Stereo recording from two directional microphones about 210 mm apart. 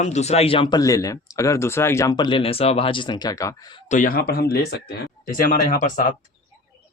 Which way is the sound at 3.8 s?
35° left (ahead or behind).